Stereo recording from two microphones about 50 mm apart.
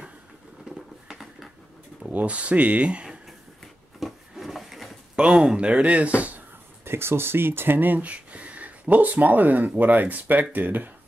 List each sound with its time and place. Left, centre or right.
0.7 s a sound: centre
2.1 s speech: right
4.0 s wood: centre
5.1 s speech: centre; by 6.4 s right
6.8 s speech: right
8.0 s speech: right